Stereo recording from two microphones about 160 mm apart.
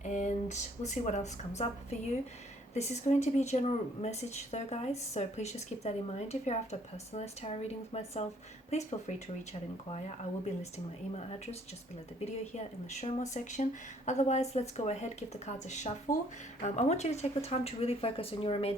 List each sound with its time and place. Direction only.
0.0 s a woman's voice: 50° left (ahead or behind)
12.2 s a woman's voice: 45° left (ahead or behind)